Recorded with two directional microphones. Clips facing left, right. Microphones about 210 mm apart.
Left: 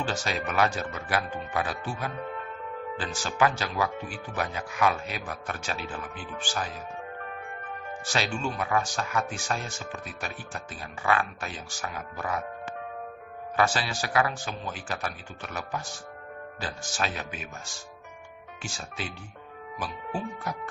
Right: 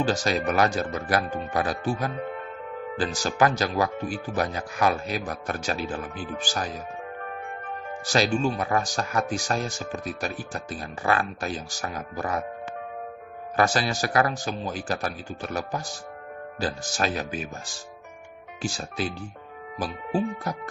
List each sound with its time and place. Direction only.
0.0 s speech: 40° right (ahead or behind)
8.0 s speech: 40° right (ahead or behind)
13.6 s speech: 45° right (ahead or behind)
19.8 s speech: 35° right (ahead or behind)